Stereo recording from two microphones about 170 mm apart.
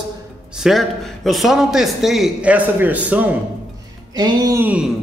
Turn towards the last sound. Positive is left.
turn(degrees=-10)  # may be behind; listen again after turning